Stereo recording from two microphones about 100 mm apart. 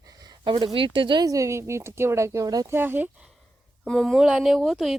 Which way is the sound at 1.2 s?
35° right (ahead or behind).